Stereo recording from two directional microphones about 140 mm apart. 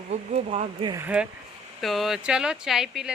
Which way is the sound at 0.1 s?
55° right (ahead or behind).